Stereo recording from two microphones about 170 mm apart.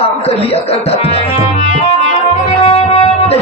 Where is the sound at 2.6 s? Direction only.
35° left (ahead or behind).